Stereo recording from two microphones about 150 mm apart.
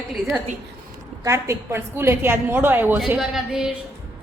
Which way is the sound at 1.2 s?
20° right (ahead or behind).